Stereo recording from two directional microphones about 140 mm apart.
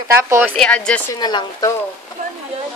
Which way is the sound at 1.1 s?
30° left (ahead or behind).